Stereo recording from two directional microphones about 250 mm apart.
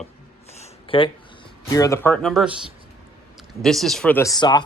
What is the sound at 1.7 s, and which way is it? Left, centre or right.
Speech, centre.